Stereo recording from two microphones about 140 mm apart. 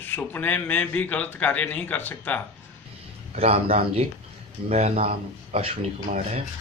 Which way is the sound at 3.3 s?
45° right (ahead or behind).